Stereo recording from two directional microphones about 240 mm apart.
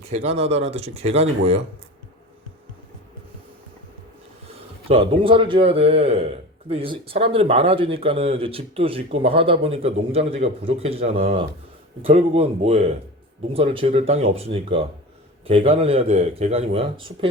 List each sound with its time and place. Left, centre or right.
0.1 s speech: right
4.4 s speech: right